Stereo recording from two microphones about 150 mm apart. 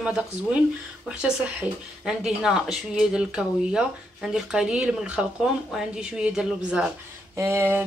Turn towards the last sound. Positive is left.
turn(degrees=-15)  # may be behind; listen again after turning